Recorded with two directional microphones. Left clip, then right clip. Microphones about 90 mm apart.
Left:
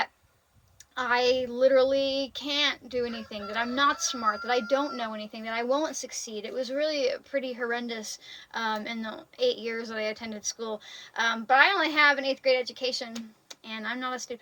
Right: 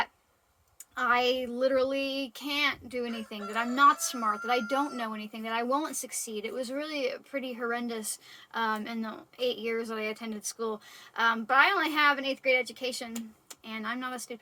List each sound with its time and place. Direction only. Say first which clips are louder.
0.9 s speech: left 2 dB; 30° right (ahead or behind)
3.4 s speech: right 3 dB; 15° right (ahead or behind); by 14.3 s 35° right (ahead or behind)